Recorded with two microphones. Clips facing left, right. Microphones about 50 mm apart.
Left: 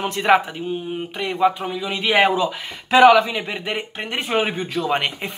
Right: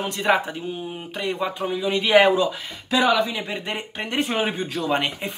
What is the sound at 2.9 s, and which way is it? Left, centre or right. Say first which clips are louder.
Speech: left 8 dB; left.